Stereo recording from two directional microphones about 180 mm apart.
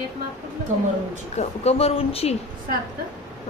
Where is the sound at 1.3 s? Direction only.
35° left (ahead or behind).